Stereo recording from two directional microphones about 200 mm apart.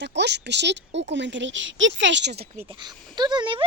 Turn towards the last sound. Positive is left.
turn(degrees=-25)  # may be behind; listen again after turning